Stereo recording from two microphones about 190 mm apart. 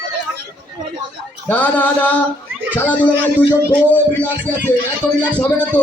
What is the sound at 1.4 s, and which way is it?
Speech, 10° left (ahead or behind).